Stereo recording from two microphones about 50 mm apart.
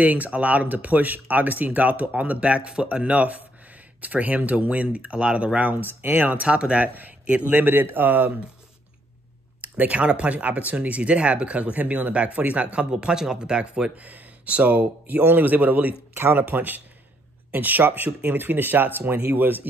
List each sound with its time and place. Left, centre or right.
0.0 s speech: right
5.8 s speech: right
6.9 s speech: right
7.5 s speech: right
9.6 s speech: right
13.9 s speech: right